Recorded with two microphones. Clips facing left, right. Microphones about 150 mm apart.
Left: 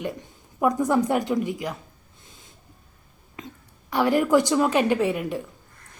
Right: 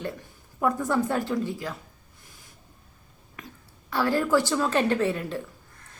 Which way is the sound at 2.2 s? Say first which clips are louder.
Left 2 dB; 20° left (ahead or behind).